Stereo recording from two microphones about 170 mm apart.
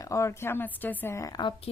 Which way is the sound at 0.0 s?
15° left (ahead or behind).